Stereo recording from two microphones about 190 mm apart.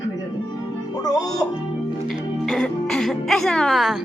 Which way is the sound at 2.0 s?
Centre (ahead or behind).